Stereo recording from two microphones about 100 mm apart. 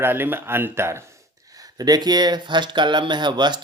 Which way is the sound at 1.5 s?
40° right (ahead or behind).